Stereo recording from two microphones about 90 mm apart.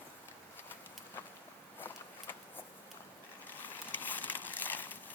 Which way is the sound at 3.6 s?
20° left (ahead or behind).